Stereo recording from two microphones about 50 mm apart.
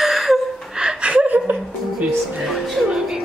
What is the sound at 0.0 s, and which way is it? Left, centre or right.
Gasp, centre.